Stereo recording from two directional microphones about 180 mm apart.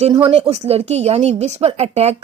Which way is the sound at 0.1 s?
30° right (ahead or behind).